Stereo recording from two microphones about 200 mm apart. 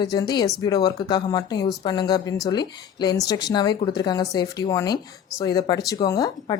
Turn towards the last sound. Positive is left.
turn(degrees=20)  # may be behind; listen again after turning